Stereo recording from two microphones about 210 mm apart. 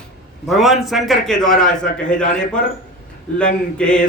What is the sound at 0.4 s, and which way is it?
A man's voice, centre (ahead or behind).